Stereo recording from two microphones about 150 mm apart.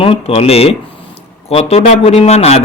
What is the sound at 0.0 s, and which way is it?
A man's voice, 40° left (ahead or behind).